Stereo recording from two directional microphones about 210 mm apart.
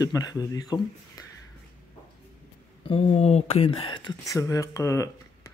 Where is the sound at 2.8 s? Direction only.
30° left (ahead or behind).